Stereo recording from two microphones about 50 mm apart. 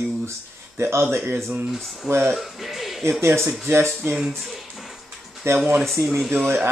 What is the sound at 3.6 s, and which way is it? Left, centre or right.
Speech, right.